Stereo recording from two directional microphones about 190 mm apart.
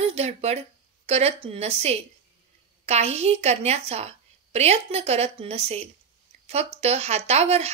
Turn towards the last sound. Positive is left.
turn(degrees=-35)  # may be behind; listen again after turning